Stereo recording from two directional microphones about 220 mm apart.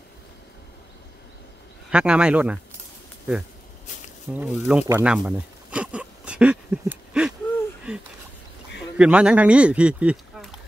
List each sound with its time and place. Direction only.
1.9 s speech: 5° right (ahead or behind)
4.3 s a sound: 5° right (ahead or behind)
8.9 s speech: 5° right (ahead or behind)